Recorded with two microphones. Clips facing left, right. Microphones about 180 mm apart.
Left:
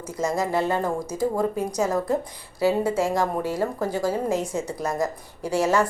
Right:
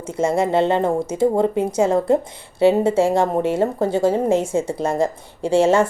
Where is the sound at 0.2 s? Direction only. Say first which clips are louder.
Right 6 dB; 25° right (ahead or behind).